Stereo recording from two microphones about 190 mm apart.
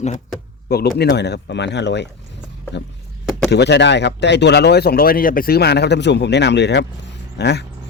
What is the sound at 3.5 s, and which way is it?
Speech, 65° left (ahead or behind).